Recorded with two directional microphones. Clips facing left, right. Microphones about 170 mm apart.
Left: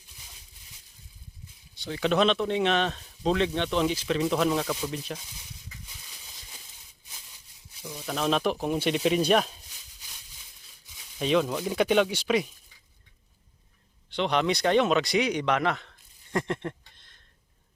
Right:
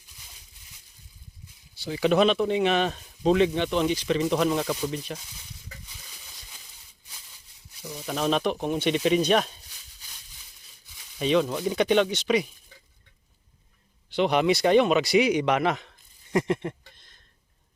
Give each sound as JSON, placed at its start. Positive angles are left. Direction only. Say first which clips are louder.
{"t": 1.8, "sound": "speech", "louder": "right 3 dB", "side_deg": -5}
{"t": 7.8, "sound": "speech", "louder": "right 2 dB", "side_deg": -5}
{"t": 11.2, "sound": "speech", "louder": "right 2 dB", "side_deg": 0}
{"t": 14.1, "sound": "a man's voice", "louder": "right 4 dB", "side_deg": -10}